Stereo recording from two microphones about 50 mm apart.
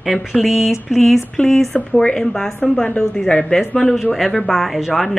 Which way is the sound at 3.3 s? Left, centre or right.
Left.